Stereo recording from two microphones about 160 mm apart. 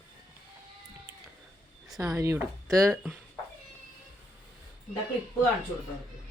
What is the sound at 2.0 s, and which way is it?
Speech, 20° right (ahead or behind).